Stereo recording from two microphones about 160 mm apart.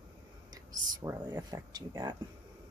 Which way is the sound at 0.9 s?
20° right (ahead or behind).